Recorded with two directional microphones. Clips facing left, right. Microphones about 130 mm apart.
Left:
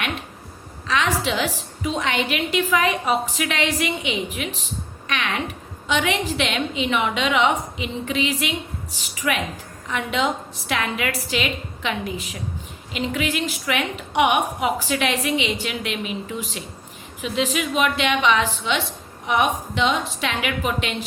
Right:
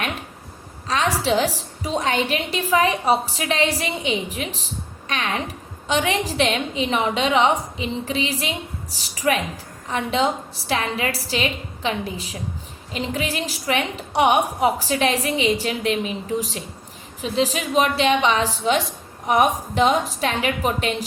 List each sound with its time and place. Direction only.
0.9 s a woman's voice: 35° right (ahead or behind)